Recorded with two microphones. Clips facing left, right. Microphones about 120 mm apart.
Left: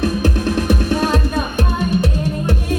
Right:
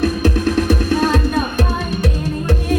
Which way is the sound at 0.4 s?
20° left (ahead or behind).